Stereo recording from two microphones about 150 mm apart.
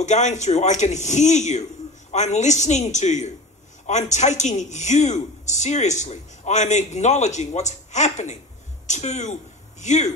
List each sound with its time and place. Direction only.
0.0 s a man's voice: 50° left (ahead or behind)